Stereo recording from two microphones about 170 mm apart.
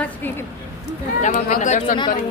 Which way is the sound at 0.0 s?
10° left (ahead or behind).